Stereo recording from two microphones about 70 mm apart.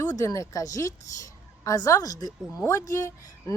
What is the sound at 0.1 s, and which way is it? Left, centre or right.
A woman's voice, left.